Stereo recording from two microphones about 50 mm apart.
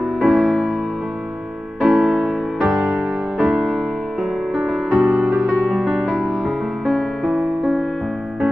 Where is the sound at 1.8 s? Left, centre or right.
Centre.